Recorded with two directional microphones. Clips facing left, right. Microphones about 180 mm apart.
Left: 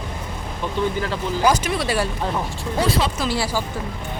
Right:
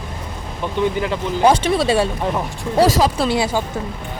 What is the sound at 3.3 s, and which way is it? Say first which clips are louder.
Speech: right 4 dB; 20° right (ahead or behind).